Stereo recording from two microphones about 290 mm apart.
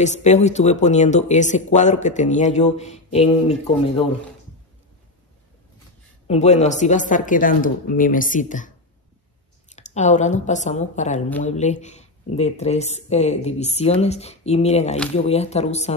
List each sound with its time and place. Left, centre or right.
0.0 s speech: left
6.2 s speech: left
9.8 s speech: left